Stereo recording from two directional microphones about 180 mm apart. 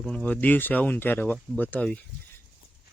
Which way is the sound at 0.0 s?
5° left (ahead or behind).